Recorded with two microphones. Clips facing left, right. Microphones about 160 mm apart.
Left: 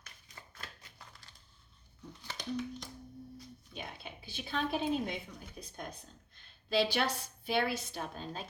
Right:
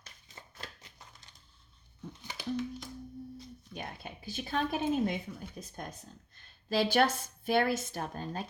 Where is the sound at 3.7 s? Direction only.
45° right (ahead or behind).